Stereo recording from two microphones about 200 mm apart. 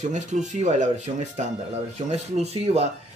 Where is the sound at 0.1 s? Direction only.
35° right (ahead or behind).